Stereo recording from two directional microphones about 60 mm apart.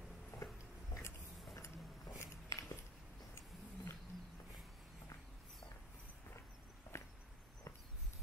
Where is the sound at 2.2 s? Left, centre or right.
Left.